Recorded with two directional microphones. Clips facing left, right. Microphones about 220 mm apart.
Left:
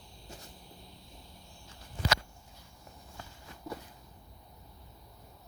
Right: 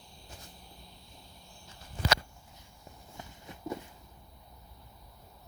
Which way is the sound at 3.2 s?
20° right (ahead or behind).